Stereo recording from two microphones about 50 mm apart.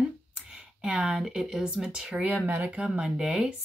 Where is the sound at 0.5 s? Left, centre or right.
Centre.